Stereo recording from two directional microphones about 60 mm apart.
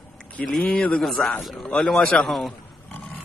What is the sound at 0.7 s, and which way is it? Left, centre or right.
Speech, left.